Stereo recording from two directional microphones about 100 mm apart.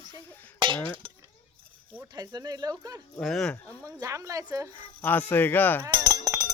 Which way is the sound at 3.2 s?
5° left (ahead or behind).